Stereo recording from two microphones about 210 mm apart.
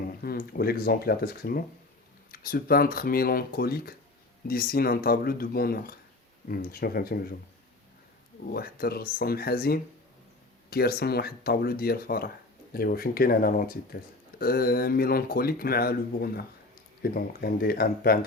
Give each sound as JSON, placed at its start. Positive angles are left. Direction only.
{"t": 0.2, "sound": "speech", "side_deg": 45}
{"t": 8.5, "sound": "speech", "side_deg": 45}